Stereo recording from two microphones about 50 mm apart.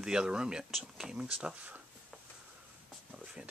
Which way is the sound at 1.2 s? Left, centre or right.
Right.